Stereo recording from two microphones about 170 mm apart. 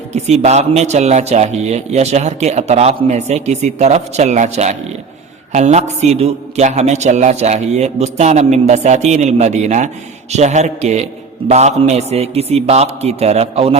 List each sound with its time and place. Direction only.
0.1 s a man's voice: 40° right (ahead or behind)